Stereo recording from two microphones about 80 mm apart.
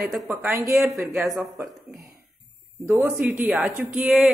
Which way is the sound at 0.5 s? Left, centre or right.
Right.